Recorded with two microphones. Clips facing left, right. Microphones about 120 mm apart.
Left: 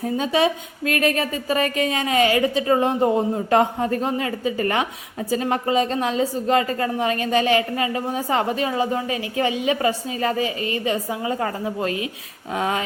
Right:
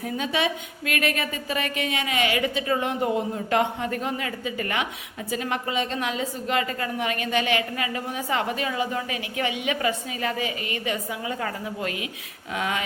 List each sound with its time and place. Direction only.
0.0 s a woman's voice: 35° left (ahead or behind)